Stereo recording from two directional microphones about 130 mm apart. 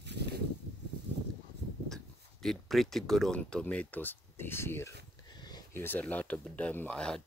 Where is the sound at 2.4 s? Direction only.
Centre (ahead or behind).